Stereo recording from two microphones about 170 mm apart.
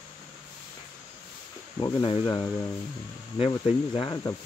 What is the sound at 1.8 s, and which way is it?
Speech, 25° left (ahead or behind).